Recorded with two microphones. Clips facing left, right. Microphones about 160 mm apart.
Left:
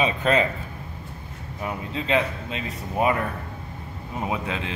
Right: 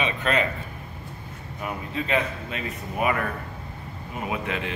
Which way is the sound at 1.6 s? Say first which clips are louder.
Left 1 dB; 25° left (ahead or behind).